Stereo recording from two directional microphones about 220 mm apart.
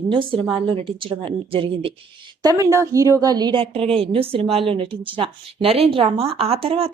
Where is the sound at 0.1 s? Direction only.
20° right (ahead or behind).